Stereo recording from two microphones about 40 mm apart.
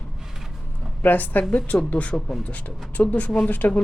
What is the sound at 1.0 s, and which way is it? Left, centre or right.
Speech, left.